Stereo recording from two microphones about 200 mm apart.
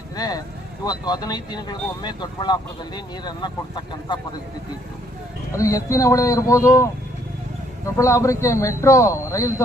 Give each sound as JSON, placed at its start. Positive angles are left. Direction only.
{"t": 0.2, "sound": "speech", "side_deg": 20}
{"t": 5.5, "sound": "a man's voice", "side_deg": 15}
{"t": 7.9, "sound": "a man's voice", "side_deg": 15}